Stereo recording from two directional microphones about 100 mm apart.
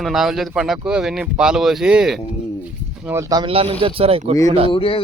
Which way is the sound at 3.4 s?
70° right (ahead or behind).